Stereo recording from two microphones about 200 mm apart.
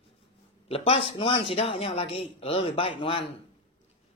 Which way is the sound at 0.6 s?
30° left (ahead or behind).